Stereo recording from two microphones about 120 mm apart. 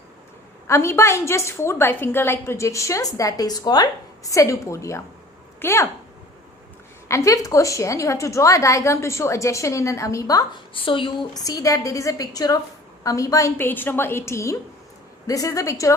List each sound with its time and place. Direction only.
0.7 s a woman's voice: 25° left (ahead or behind)
7.1 s a woman's voice: 25° left (ahead or behind)
10.8 s a woman's voice: 45° left (ahead or behind); by 16.0 s 25° left (ahead or behind)